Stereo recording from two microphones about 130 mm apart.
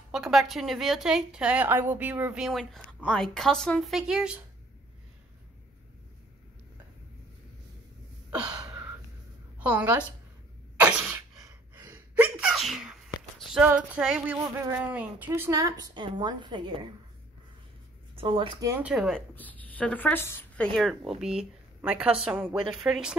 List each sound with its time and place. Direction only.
0.1 s a woman's voice: 5° right (ahead or behind)
2.6 s a woman's voice: 10° left (ahead or behind)
9.6 s a woman's voice: 10° right (ahead or behind)
10.8 s cough: 15° right (ahead or behind)
11.4 s gasp: 30° right (ahead or behind)
11.9 s sneeze: 10° right (ahead or behind)
13.7 s female singing: 5° right (ahead or behind)
14.8 s a woman's voice: 10° right (ahead or behind); by 16.8 s 40° right (ahead or behind)
18.1 s speech: 40° right (ahead or behind)
18.8 s female singing: 10° right (ahead or behind)
19.0 s a woman's voice: 10° left (ahead or behind)